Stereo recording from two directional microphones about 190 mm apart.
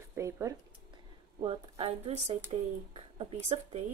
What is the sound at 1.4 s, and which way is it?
A woman's voice, 30° right (ahead or behind).